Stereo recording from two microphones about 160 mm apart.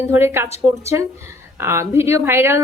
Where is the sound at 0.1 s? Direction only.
15° right (ahead or behind).